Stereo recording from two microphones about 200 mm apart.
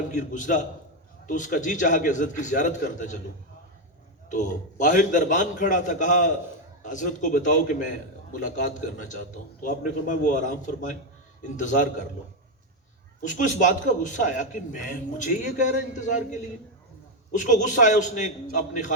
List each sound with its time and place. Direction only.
0.1 s a man's voice: 40° left (ahead or behind)
4.3 s a man's voice: 40° left (ahead or behind)
13.2 s a man's voice: 40° left (ahead or behind)